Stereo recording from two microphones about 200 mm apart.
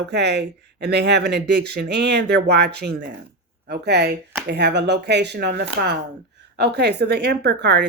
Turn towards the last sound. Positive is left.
turn(degrees=-60)  # may be behind; listen again after turning